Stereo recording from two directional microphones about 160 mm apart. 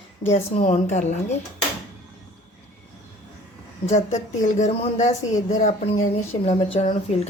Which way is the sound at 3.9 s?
45° left (ahead or behind).